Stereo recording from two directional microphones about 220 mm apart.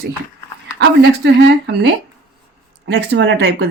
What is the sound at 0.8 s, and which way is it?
Speech, 50° right (ahead or behind).